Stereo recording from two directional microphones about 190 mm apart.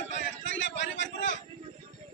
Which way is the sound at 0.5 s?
70° left (ahead or behind).